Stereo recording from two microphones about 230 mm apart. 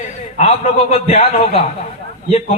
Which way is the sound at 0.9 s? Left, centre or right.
Left.